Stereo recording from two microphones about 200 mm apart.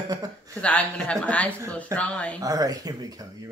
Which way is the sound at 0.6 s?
5° left (ahead or behind).